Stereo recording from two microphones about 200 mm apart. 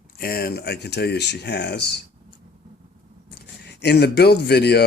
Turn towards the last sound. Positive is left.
turn(degrees=55)  # may be behind; listen again after turning